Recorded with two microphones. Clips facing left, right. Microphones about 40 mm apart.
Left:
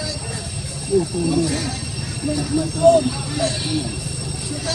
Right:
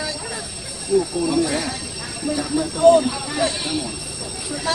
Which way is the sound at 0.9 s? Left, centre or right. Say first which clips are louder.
Even; right.